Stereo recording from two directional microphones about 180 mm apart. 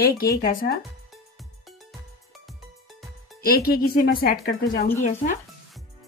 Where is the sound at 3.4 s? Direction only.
55° left (ahead or behind).